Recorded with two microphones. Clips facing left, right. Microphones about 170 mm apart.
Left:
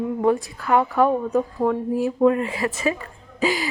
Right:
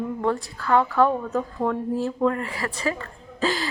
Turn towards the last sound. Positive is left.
turn(degrees=15)  # may be behind; listen again after turning